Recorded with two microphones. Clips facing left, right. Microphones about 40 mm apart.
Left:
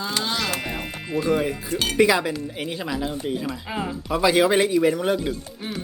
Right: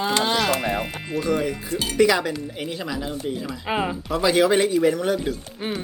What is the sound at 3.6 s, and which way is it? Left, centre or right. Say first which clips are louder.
Speech: right 4 dB; right.